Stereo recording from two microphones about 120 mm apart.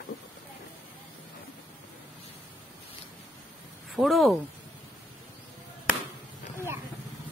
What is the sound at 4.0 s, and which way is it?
Speech, centre (ahead or behind).